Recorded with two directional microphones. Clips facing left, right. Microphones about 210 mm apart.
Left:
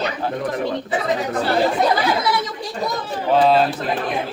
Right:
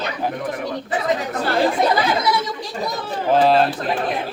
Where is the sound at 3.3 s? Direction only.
Centre (ahead or behind).